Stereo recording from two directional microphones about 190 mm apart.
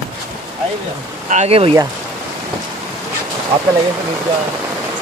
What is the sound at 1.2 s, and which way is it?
Speech, 35° right (ahead or behind).